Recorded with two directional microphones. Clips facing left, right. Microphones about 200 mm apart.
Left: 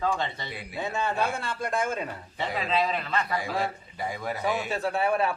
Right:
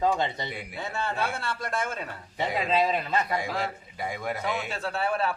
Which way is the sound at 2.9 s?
15° right (ahead or behind).